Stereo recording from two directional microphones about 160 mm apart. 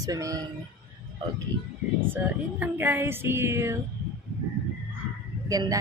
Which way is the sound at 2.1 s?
10° right (ahead or behind).